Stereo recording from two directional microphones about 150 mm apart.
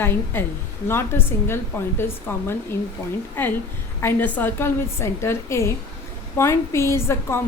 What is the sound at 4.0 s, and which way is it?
A woman's voice, 15° left (ahead or behind).